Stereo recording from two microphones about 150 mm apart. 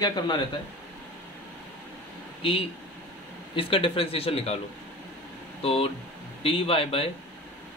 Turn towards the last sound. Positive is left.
turn(degrees=40)  # may be behind; listen again after turning